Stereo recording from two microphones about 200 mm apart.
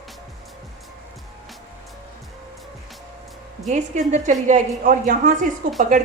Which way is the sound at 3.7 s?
35° right (ahead or behind).